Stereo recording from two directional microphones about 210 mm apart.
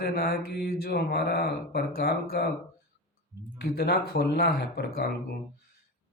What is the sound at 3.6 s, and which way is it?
Speech, 50° left (ahead or behind).